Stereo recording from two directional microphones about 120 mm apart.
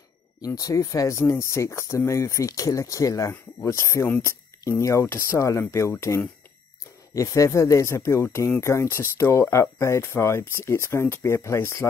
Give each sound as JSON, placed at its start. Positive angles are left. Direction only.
{"t": 0.6, "sound": "speech", "side_deg": 30}